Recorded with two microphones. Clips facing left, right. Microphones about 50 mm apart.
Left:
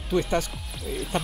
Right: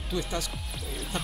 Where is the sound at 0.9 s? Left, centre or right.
Centre.